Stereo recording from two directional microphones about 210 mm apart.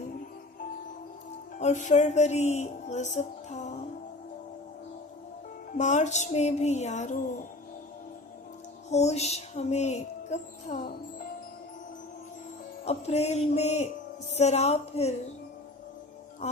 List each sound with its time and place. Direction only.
1.5 s music: 35° left (ahead or behind)
5.7 s music: 35° left (ahead or behind)
8.9 s music: 30° left (ahead or behind)
12.8 s music: 30° left (ahead or behind)